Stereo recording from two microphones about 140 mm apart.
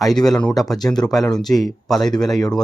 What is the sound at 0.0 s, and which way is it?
Speech, centre (ahead or behind).